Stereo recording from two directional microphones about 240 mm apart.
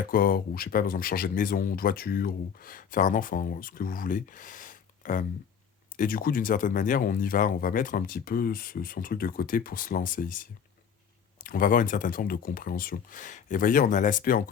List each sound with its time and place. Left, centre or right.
0.1 s speech: left